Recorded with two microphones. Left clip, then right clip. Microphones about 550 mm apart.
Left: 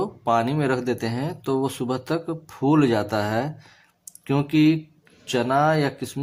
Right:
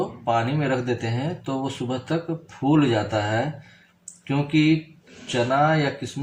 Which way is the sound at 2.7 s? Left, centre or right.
Left.